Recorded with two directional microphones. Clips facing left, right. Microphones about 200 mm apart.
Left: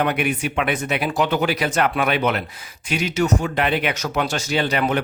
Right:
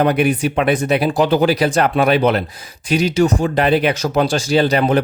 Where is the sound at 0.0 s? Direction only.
35° right (ahead or behind).